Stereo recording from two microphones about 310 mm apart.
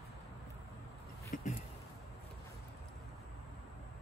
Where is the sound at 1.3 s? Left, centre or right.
Left.